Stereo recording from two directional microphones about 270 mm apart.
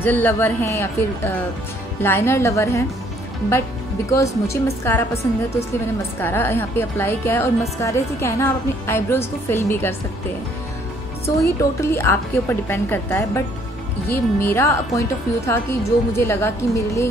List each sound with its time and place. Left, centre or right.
0.0 s a woman's voice: centre
4.1 s a woman's voice: centre
11.2 s a woman's voice: centre